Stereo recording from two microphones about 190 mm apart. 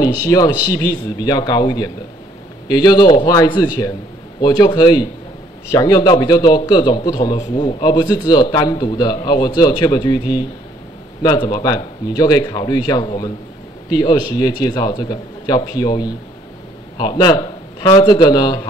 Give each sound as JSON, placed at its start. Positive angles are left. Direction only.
{"t": 0.3, "sound": "a man's voice", "side_deg": 20}